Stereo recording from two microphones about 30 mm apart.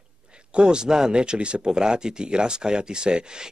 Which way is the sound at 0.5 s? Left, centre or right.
Right.